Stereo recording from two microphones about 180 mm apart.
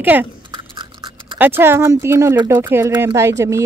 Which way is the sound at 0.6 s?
25° right (ahead or behind).